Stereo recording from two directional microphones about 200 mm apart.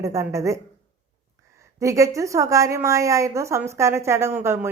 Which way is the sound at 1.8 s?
15° right (ahead or behind).